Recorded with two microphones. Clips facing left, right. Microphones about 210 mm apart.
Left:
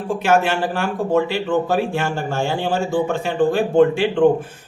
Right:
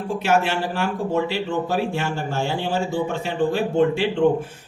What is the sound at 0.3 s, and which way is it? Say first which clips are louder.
A man's voice: left 3 dB; 50° left (ahead or behind).